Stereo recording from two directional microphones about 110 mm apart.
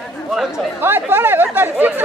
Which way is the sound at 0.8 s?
20° right (ahead or behind).